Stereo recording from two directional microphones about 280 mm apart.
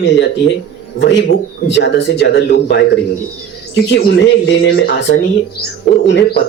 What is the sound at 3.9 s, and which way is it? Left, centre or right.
Speech, left.